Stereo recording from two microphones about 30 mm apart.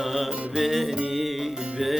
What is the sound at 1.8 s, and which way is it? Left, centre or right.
Music, centre.